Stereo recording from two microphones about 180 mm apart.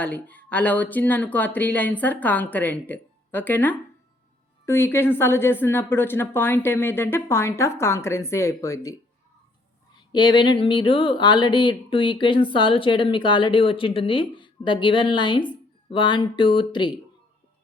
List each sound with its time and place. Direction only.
0.0 s a woman's voice: 10° left (ahead or behind); by 17.0 s 25° left (ahead or behind)